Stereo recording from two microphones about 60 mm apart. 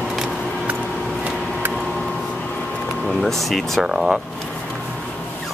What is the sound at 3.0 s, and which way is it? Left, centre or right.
Speech, centre.